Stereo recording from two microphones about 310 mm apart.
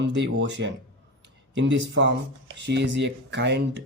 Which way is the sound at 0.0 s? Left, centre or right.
Right.